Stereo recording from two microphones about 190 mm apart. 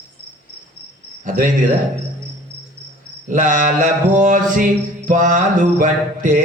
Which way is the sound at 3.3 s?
40° right (ahead or behind).